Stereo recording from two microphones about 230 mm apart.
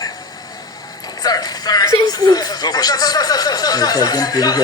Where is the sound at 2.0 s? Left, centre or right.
Centre.